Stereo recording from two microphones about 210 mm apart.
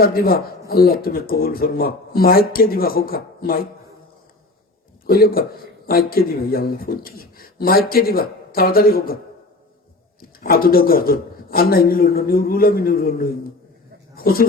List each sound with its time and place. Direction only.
0.0 s speech: 45° left (ahead or behind)
5.0 s speech: 45° left (ahead or behind)
10.2 s speech: 45° left (ahead or behind)